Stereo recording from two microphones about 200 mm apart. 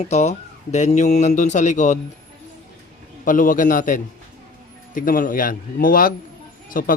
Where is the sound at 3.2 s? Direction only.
45° left (ahead or behind).